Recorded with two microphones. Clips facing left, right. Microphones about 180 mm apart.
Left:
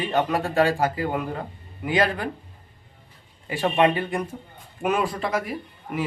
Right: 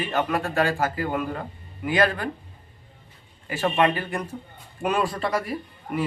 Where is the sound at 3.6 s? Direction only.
20° left (ahead or behind).